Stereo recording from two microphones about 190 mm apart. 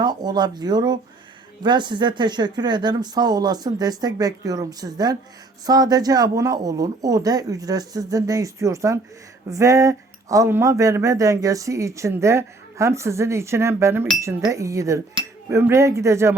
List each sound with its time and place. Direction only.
0.0 s speech: 20° right (ahead or behind)